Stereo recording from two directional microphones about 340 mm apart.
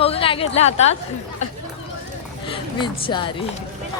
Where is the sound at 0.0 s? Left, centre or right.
Centre.